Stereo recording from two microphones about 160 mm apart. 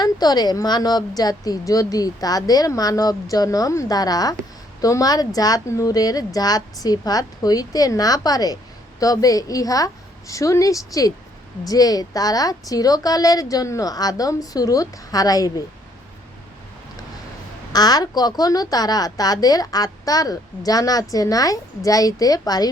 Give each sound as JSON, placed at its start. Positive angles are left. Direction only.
{"t": 0.0, "sound": "a woman's voice", "side_deg": 25}
{"t": 17.7, "sound": "a woman's voice", "side_deg": 25}